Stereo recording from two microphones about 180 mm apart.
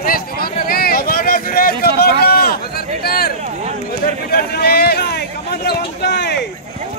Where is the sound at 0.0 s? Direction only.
55° left (ahead or behind).